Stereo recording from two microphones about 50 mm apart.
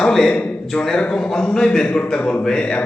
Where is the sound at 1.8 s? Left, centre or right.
Left.